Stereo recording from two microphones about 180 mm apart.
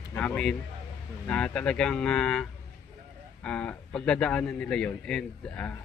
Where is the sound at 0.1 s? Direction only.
5° left (ahead or behind).